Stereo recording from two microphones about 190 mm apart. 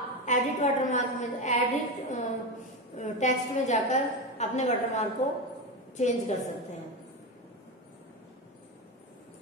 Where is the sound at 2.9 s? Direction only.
40° left (ahead or behind).